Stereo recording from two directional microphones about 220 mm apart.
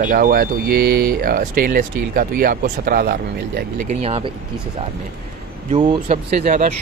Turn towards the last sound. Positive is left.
turn(degrees=-35)  # may be behind; listen again after turning